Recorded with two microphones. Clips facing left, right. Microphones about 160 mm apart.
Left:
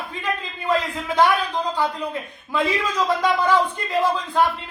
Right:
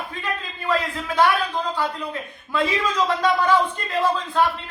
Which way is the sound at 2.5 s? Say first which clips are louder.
Even; 15° left (ahead or behind).